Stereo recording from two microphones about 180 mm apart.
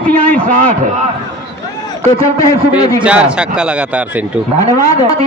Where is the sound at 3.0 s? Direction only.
5° right (ahead or behind).